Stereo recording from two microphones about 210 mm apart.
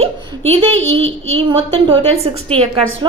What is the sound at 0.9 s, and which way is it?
Speech, 65° right (ahead or behind).